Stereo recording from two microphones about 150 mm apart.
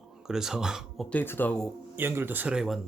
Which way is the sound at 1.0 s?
10° left (ahead or behind).